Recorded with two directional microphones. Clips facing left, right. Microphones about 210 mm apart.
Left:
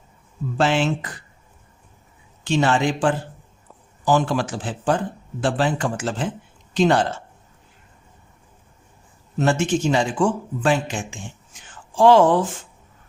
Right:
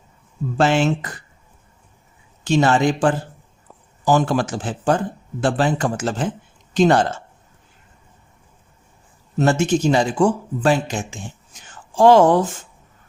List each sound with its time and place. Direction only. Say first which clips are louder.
0.5 s speech: right 3 dB; 45° right (ahead or behind)
2.4 s speech: right 3 dB; 40° right (ahead or behind)
9.4 s speech: right 3 dB; 40° right (ahead or behind)